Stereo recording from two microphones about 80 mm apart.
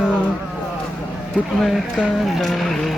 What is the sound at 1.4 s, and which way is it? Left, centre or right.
Speech, centre.